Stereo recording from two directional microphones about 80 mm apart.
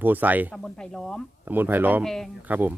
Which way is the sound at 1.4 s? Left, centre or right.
Right.